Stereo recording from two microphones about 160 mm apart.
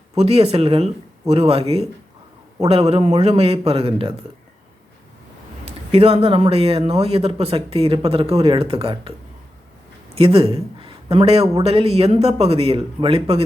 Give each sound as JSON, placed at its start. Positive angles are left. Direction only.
{"t": 0.2, "sound": "speech", "side_deg": -40}
{"t": 5.9, "sound": "speech", "side_deg": -40}
{"t": 10.2, "sound": "a man's voice", "side_deg": -35}